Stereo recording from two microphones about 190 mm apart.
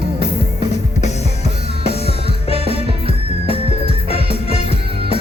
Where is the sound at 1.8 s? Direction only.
30° left (ahead or behind).